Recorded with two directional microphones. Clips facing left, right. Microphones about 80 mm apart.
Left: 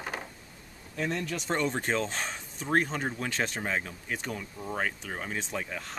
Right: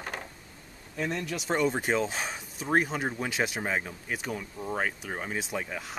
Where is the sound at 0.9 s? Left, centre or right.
Centre.